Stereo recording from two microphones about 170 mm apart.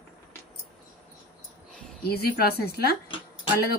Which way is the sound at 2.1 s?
65° left (ahead or behind).